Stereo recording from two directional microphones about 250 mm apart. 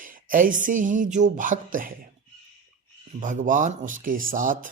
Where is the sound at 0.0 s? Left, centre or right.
Right.